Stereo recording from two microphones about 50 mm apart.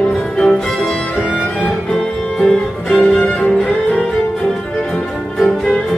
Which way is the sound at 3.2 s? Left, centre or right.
Left.